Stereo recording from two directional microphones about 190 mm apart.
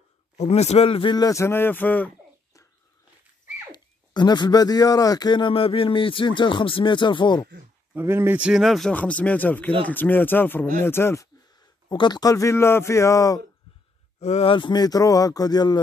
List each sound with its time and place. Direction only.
0.4 s speech: 35° left (ahead or behind); by 2.6 s 10° left (ahead or behind)
3.7 s speech: 25° left (ahead or behind)
7.9 s a man's voice: 10° right (ahead or behind); by 13.4 s 15° left (ahead or behind)
14.2 s speech: 30° left (ahead or behind)